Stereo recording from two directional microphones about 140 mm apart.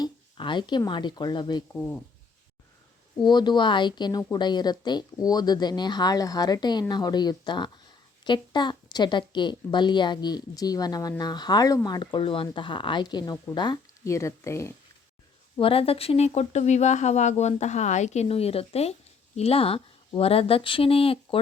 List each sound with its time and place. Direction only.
0.0 s a sound: 35° left (ahead or behind)
0.9 s a woman's voice: 35° left (ahead or behind)
3.2 s a woman's voice: 30° left (ahead or behind)
15.5 s speech: 40° left (ahead or behind)